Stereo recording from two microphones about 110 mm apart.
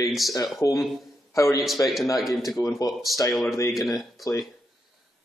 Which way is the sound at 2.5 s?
30° left (ahead or behind).